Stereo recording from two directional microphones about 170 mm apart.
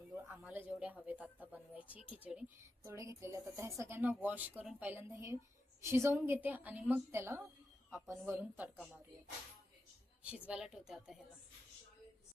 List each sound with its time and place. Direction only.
0.3 s a sound: 10° right (ahead or behind)
1.0 s a woman's voice: 10° right (ahead or behind)
2.8 s a woman's voice: 15° right (ahead or behind)
8.7 s a woman's voice: 5° left (ahead or behind)
10.2 s a woman's voice: 5° right (ahead or behind)